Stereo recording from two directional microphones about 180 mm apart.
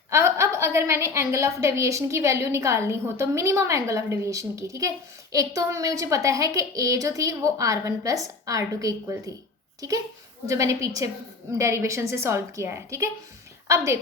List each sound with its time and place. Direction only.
0.1 s a woman's voice: 15° right (ahead or behind)
10.4 s a woman's voice: 15° right (ahead or behind)